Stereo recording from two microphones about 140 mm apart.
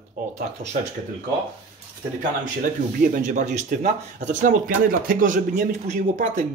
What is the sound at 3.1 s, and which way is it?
Speech, 60° right (ahead or behind).